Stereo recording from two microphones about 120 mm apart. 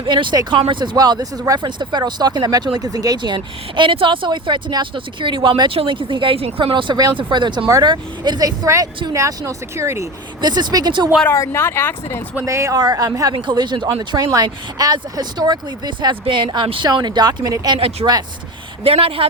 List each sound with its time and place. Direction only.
0.1 s speech: 40° right (ahead or behind); by 10.1 s 25° right (ahead or behind)
10.4 s speech: 35° right (ahead or behind)
11.3 s speech: 20° left (ahead or behind)
12.5 s speech: 25° right (ahead or behind)
18.9 s speech: 50° right (ahead or behind)